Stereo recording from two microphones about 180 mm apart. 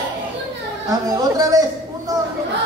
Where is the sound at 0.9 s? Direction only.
20° right (ahead or behind).